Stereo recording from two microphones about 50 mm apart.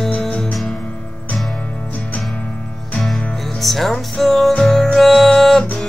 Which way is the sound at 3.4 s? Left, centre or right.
Centre.